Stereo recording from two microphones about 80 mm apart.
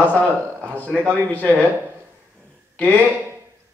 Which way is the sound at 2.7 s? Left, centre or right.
Centre.